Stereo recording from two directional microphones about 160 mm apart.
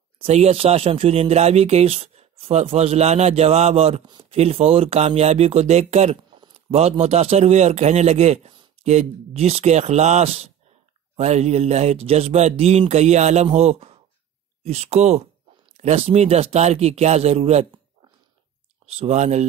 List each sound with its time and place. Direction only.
0.2 s speech: 40° right (ahead or behind)
18.9 s speech: 45° right (ahead or behind)